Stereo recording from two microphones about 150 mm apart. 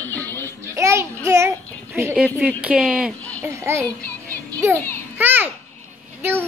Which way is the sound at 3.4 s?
20° right (ahead or behind).